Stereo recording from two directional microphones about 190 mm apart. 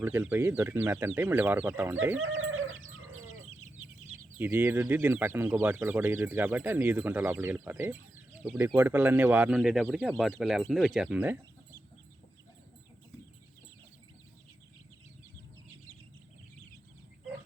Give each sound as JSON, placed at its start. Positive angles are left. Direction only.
{"t": 0.0, "sound": "speech", "side_deg": -10}
{"t": 2.1, "sound": "chicken", "side_deg": -90}
{"t": 4.4, "sound": "speech", "side_deg": -10}